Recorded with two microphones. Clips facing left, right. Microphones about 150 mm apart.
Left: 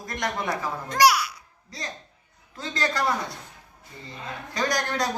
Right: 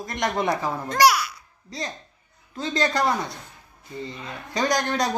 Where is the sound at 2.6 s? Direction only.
20° right (ahead or behind).